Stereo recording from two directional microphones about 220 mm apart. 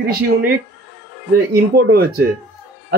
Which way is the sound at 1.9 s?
45° right (ahead or behind).